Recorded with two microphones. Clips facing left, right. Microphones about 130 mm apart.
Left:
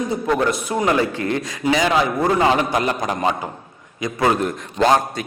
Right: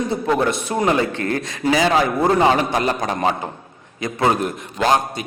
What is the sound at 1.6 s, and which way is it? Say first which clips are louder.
Speech: right 1 dB; 35° right (ahead or behind).